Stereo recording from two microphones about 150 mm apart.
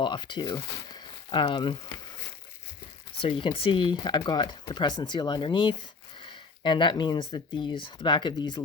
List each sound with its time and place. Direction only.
0.0 s speech: 30° left (ahead or behind)
3.2 s speech: 35° left (ahead or behind)